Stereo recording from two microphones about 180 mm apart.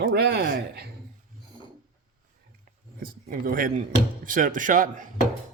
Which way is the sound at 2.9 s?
50° right (ahead or behind).